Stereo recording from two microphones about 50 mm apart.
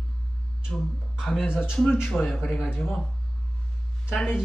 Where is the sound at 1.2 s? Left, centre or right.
Centre.